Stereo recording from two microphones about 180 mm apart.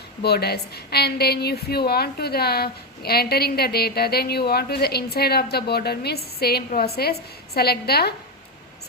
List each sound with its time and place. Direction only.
0.2 s a woman's voice: 65° left (ahead or behind)